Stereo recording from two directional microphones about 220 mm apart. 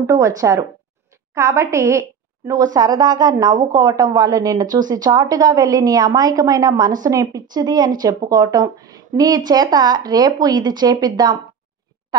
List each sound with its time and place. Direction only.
0.0 s a woman's voice: 15° right (ahead or behind)